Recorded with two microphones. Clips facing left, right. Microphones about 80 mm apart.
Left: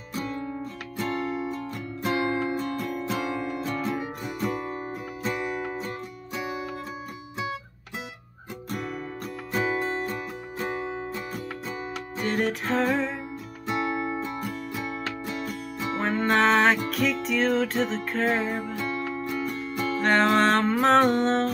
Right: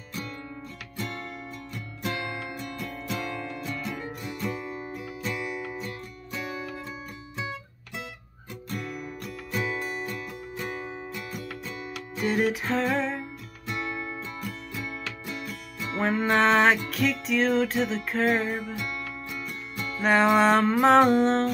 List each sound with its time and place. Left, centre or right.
2.0 s music: left
3.6 s music: left
3.9 s music: centre
4.6 s music: left
5.3 s music: left
9.5 s music: left
12.2 s music: centre
13.9 s music: left
16.0 s music: centre
18.8 s music: left
20.0 s music: centre